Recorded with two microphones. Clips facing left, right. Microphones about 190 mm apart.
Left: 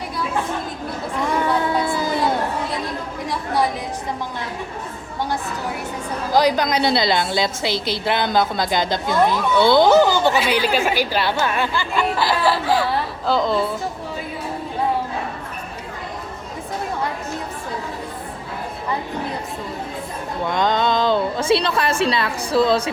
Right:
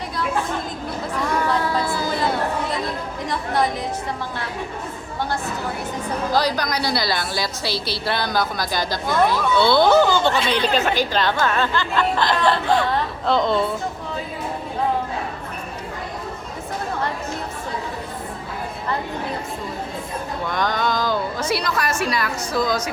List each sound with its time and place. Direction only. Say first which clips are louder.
1.5 s a sound: left 2 dB; 15° left (ahead or behind)
3.2 s chatter: left 1 dB; 10° left (ahead or behind)
6.3 s a woman's voice: left 6 dB; 20° left (ahead or behind); by 13.7 s centre (ahead or behind)
20.5 s a woman's voice: left 4 dB; 20° left (ahead or behind)